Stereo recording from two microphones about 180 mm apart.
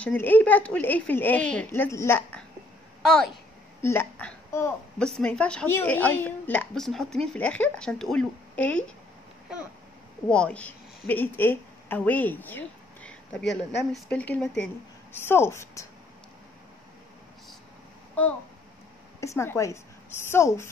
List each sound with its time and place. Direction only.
0.0 s a woman's voice: 10° left (ahead or behind)
10.3 s a woman's voice: 5° left (ahead or behind)
19.1 s a woman's voice: 15° left (ahead or behind)